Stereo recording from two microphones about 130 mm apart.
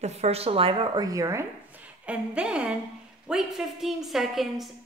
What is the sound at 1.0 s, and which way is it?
Speech, 25° right (ahead or behind).